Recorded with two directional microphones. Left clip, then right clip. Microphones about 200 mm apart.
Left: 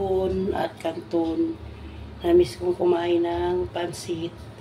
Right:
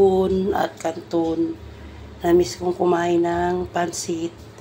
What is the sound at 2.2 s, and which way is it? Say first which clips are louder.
Speech: right 1 dB; 10° right (ahead or behind).